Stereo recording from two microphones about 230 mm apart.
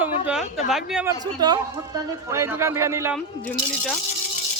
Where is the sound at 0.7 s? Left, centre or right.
Centre.